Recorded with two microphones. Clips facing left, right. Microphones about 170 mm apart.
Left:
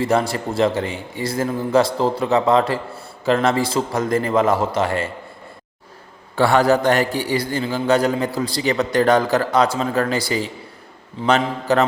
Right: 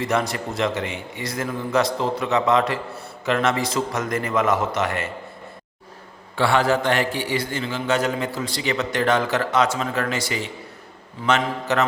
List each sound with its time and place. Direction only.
0.0 s a man's voice: 30° left (ahead or behind)
6.3 s a man's voice: 40° left (ahead or behind)